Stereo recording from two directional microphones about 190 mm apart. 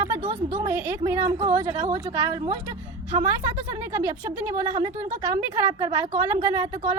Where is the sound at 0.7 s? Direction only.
15° right (ahead or behind).